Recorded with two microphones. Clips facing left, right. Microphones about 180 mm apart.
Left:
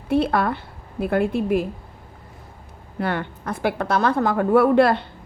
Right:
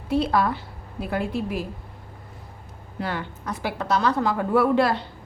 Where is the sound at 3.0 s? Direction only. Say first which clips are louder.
Left 5 dB; 55° left (ahead or behind).